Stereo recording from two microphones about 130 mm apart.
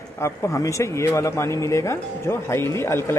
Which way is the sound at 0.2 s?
20° left (ahead or behind).